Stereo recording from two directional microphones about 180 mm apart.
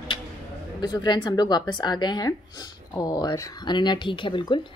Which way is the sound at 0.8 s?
25° left (ahead or behind).